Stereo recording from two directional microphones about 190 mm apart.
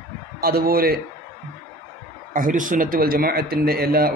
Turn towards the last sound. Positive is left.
turn(degrees=-55)  # may be behind; listen again after turning